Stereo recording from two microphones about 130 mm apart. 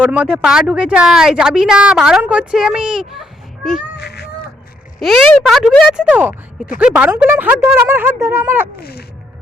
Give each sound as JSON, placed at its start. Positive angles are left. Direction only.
{"t": 0.0, "sound": "a child's voice", "side_deg": -10}
{"t": 4.9, "sound": "speech", "side_deg": 0}